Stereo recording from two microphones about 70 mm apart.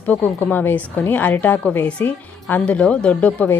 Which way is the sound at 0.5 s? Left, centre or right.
Left.